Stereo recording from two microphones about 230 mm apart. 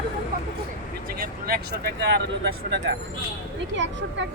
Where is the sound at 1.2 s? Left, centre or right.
Right.